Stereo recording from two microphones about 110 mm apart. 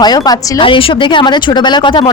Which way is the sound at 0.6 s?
55° left (ahead or behind).